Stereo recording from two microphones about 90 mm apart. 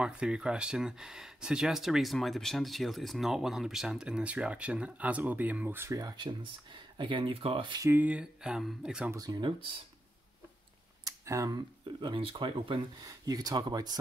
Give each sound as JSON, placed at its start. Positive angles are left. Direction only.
{"t": 0.0, "sound": "speech", "side_deg": -10}
{"t": 5.9, "sound": "speech", "side_deg": -55}
{"t": 7.9, "sound": "speech", "side_deg": -15}
{"t": 9.1, "sound": "speech", "side_deg": -45}
{"t": 11.1, "sound": "a sound", "side_deg": -40}
{"t": 11.5, "sound": "speech", "side_deg": -60}
{"t": 13.0, "sound": "speech", "side_deg": -45}